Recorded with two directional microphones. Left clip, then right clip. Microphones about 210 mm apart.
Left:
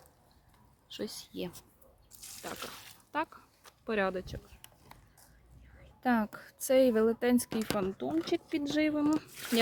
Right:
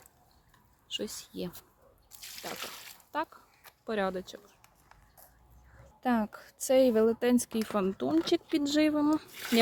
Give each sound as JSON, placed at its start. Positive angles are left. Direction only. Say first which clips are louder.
{"t": 0.9, "sound": "speech", "louder": "right 4 dB", "side_deg": -10}
{"t": 2.5, "sound": "water", "louder": "right 1 dB", "side_deg": -20}
{"t": 3.1, "sound": "a woman's voice", "louder": "even", "side_deg": -5}
{"t": 6.0, "sound": "a woman's voice", "louder": "even", "side_deg": -15}
{"t": 7.8, "sound": "speech", "louder": "right 7 dB", "side_deg": -40}